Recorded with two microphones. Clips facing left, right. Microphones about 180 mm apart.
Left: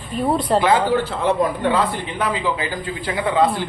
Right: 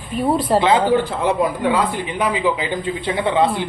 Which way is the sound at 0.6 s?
20° right (ahead or behind).